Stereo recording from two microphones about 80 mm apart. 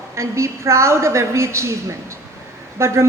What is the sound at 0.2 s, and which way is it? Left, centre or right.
A woman's voice, right.